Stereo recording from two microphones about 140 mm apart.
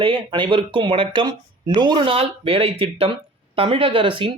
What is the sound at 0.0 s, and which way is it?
Speech, 40° right (ahead or behind).